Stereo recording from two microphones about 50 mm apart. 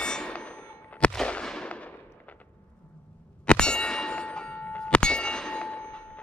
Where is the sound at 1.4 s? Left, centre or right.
Centre.